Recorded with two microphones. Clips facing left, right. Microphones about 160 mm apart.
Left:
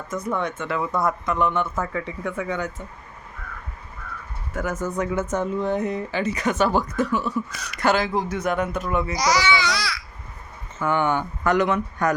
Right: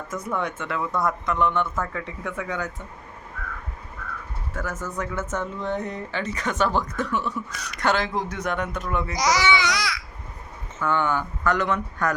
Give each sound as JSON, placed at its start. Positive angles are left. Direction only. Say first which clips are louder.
{"t": 0.3, "sound": "speech", "louder": "right 2 dB", "side_deg": -10}
{"t": 0.7, "sound": "speech", "louder": "left 2 dB", "side_deg": 5}
{"t": 4.5, "sound": "speech", "louder": "left 5 dB", "side_deg": 15}
{"t": 9.1, "sound": "speech", "louder": "right 1 dB", "side_deg": -20}
{"t": 10.8, "sound": "speech", "louder": "left 2 dB", "side_deg": 15}